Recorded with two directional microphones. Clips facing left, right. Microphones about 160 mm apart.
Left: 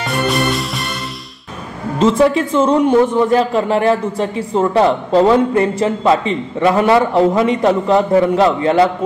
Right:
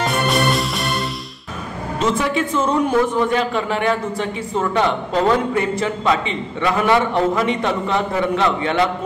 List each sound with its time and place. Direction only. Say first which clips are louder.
0.0 s music: left 1 dB; centre (ahead or behind)
2.0 s a man's voice: left 7 dB; 35° left (ahead or behind)